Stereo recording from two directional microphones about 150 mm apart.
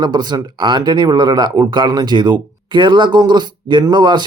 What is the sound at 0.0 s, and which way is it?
A man's voice, 30° right (ahead or behind).